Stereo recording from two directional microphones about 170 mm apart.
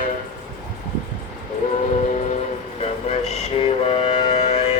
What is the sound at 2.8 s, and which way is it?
Music, 40° left (ahead or behind).